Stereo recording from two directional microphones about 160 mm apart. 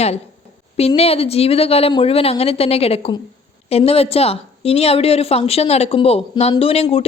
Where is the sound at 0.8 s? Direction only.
40° left (ahead or behind).